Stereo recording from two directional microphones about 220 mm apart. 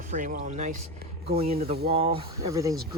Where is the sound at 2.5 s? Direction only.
15° right (ahead or behind).